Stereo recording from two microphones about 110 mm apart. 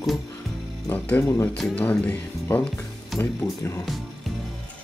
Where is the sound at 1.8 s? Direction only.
15° left (ahead or behind).